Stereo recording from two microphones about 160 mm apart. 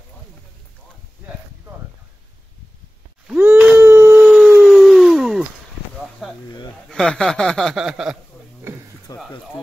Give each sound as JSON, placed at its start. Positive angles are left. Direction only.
{"t": 3.3, "sound": "dog", "side_deg": -5}
{"t": 4.5, "sound": "a sound", "side_deg": 0}
{"t": 6.2, "sound": "snake", "side_deg": 0}
{"t": 6.9, "sound": "speech", "side_deg": 5}
{"t": 9.1, "sound": "speech", "side_deg": 25}